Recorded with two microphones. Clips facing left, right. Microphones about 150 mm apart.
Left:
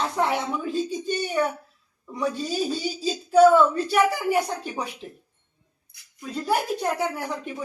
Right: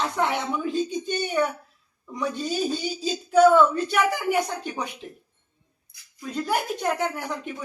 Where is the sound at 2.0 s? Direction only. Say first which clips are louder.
Left 2 dB; 5° left (ahead or behind).